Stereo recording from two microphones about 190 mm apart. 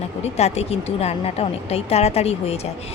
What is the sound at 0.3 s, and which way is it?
Speech, 35° left (ahead or behind).